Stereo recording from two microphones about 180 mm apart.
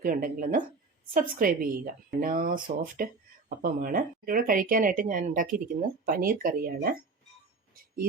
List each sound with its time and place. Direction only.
0.0 s a woman's voice: 55° right (ahead or behind)